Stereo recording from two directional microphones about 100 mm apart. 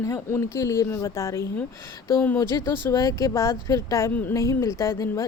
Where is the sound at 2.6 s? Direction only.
30° left (ahead or behind).